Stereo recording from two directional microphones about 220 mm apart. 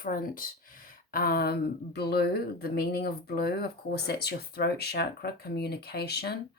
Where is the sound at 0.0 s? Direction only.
40° left (ahead or behind).